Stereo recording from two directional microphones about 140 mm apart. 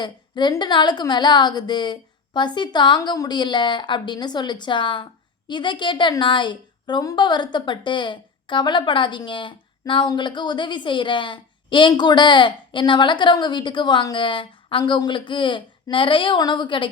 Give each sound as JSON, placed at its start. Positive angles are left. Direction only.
{"t": 0.0, "sound": "a woman's voice", "side_deg": 30}